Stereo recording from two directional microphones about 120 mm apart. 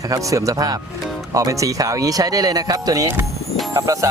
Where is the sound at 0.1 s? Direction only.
30° right (ahead or behind).